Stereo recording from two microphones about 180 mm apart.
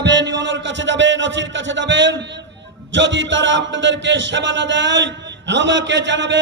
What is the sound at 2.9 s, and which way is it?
A man's voice, 90° right.